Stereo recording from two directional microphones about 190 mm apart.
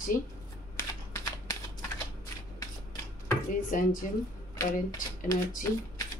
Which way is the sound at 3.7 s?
45° left (ahead or behind).